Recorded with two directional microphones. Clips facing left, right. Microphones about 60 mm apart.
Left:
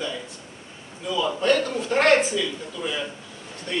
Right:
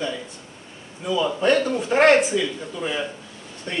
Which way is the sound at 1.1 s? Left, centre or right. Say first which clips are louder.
Right 2 dB; centre.